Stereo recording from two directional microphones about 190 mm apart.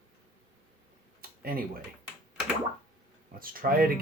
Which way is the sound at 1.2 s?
50° right (ahead or behind).